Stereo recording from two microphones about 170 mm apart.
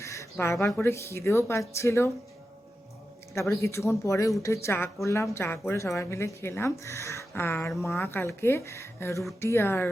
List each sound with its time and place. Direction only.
0.0 s speech: 15° left (ahead or behind)
3.3 s speech: 15° left (ahead or behind)